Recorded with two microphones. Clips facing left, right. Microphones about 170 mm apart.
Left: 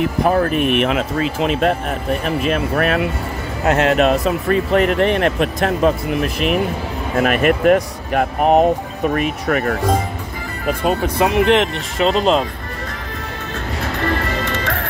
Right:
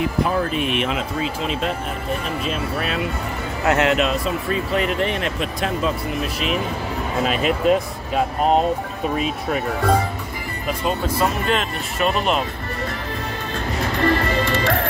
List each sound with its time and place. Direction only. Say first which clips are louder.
0.2 s speech: left 7 dB; 55° left (ahead or behind)
3.6 s speech: left 2 dB; 30° left (ahead or behind)
3.9 s speech: left 5 dB; 50° left (ahead or behind); by 9.8 s 70° left (ahead or behind)
10.7 s speech: left 4 dB; 55° left (ahead or behind)
11.2 s speech: left 10 dB; 80° left